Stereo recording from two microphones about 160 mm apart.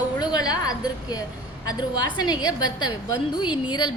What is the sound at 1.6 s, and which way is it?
A woman's voice, 25° left (ahead or behind).